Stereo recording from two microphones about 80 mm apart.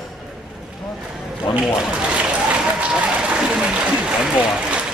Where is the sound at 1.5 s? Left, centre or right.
Centre.